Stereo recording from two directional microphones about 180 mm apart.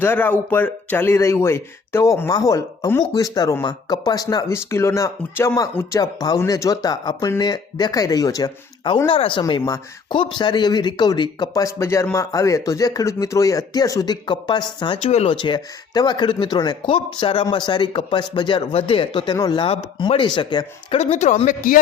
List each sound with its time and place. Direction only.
0.0 s speech: 10° left (ahead or behind); by 21.8 s 45° left (ahead or behind)